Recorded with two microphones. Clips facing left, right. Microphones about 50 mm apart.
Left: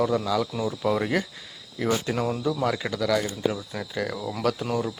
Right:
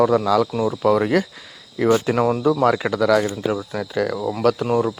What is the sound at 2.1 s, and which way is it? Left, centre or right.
Speech, right.